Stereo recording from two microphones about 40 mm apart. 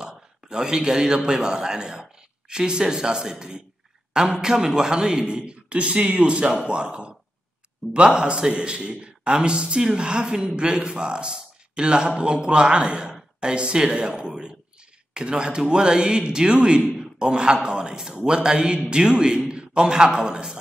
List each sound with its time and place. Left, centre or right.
0.0 s a man's voice: centre